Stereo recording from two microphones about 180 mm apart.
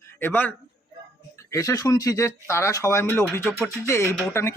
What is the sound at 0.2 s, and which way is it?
A man's voice, 10° left (ahead or behind).